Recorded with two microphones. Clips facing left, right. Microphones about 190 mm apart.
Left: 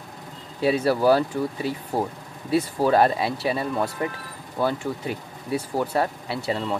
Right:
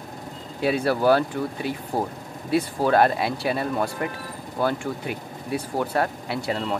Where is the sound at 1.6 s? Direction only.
35° left (ahead or behind).